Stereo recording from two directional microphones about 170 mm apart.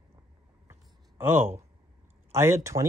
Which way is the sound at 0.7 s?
15° right (ahead or behind).